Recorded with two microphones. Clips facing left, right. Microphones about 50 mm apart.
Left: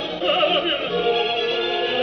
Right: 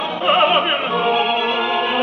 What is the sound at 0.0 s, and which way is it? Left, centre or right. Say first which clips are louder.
Opera: right 4 dB; right.